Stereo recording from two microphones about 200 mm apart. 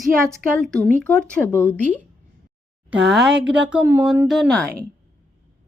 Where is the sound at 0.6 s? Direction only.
Centre (ahead or behind).